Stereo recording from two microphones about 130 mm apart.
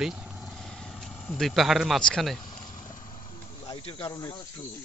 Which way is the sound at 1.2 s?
5° left (ahead or behind).